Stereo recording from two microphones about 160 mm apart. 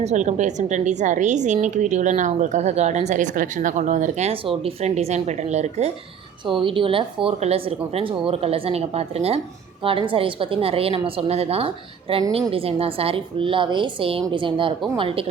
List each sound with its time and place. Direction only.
0.0 s speech: 45° right (ahead or behind)
6.4 s a woman's voice: 30° right (ahead or behind)